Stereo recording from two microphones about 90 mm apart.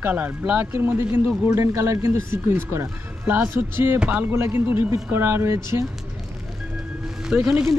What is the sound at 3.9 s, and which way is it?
Speech, 15° right (ahead or behind).